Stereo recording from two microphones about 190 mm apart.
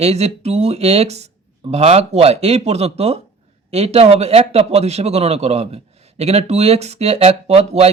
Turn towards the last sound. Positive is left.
turn(degrees=-35)  # may be behind; listen again after turning